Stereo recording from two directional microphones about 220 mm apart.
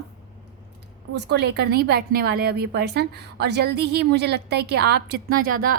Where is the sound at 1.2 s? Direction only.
50° right (ahead or behind).